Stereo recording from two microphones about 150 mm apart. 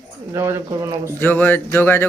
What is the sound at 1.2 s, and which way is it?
Speech, 15° left (ahead or behind).